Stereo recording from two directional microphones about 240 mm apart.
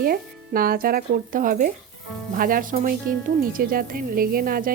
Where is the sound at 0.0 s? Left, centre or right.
Right.